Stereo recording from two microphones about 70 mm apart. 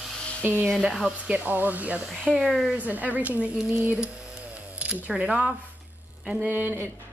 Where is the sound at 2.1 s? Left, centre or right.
Centre.